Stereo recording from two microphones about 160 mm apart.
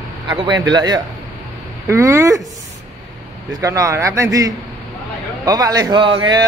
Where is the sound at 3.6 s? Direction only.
20° right (ahead or behind).